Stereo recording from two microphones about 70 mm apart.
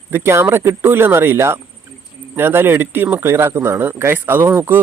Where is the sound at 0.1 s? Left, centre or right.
Right.